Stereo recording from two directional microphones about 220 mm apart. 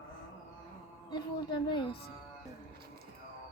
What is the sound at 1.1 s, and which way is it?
Speech, 20° left (ahead or behind).